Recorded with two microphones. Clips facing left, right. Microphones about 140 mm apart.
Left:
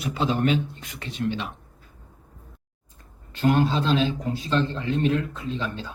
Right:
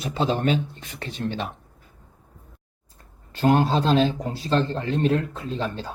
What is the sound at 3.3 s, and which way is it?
Speech, 35° right (ahead or behind).